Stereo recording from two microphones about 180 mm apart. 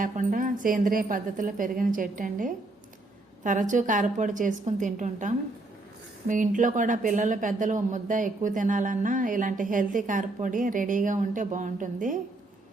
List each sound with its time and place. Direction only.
0.0 s a woman's voice: 50° right (ahead or behind)